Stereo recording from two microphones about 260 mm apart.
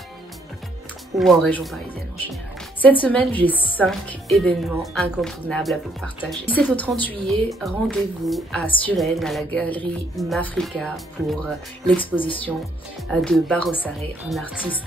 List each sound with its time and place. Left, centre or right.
1.1 s a woman's voice: centre
2.8 s a woman's voice: centre
12.0 s speech: centre
13.1 s a woman's voice: centre